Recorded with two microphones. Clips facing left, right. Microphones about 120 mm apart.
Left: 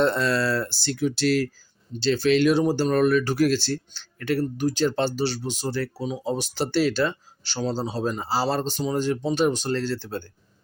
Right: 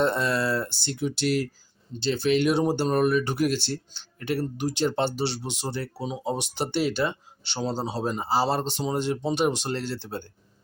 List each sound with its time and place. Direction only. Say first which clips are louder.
0.0 s speech: left 2 dB; 20° right (ahead or behind)